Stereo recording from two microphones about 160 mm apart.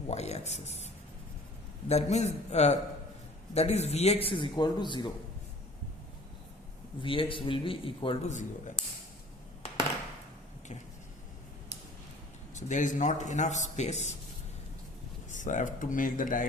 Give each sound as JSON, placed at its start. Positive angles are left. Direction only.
{"t": 0.1, "sound": "speech", "side_deg": 40}
{"t": 1.9, "sound": "a man's voice", "side_deg": 45}
{"t": 7.0, "sound": "a man's voice", "side_deg": 35}
{"t": 8.3, "sound": "speech", "side_deg": 50}
{"t": 12.5, "sound": "speech", "side_deg": 50}
{"t": 15.3, "sound": "speech", "side_deg": 50}